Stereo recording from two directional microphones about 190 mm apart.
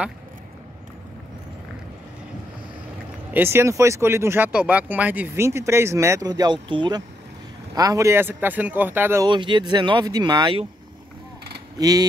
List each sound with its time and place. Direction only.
3.3 s speech: 15° right (ahead or behind)
9.3 s speech: 25° right (ahead or behind)
11.8 s speech: 20° right (ahead or behind)